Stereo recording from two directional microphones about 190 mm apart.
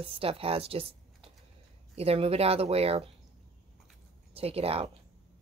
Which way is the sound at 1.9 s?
30° right (ahead or behind).